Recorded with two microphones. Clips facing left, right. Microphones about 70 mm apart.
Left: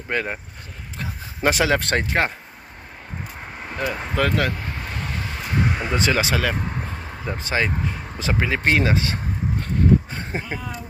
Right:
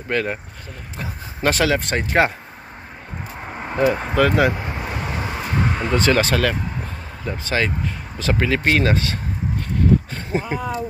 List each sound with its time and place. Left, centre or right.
0.1 s speech: centre
1.4 s speech: centre
1.8 s speech: left
3.4 s vehicle: right
5.5 s a sound: centre
5.9 s speech: centre
7.2 s speech: left
10.5 s speech: centre